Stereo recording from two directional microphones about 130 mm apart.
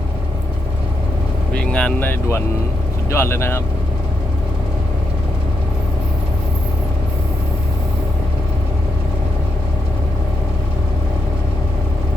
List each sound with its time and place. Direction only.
1.5 s speech: 10° left (ahead or behind)